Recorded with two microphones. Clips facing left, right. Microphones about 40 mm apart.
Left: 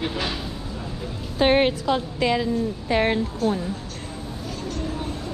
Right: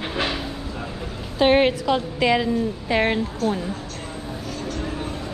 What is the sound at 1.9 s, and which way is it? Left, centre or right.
Speech, right.